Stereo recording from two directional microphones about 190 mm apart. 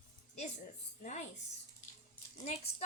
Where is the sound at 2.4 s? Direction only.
35° left (ahead or behind).